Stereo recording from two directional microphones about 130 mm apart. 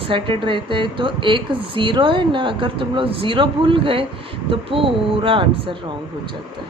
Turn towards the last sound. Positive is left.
turn(degrees=-40)  # may be behind; listen again after turning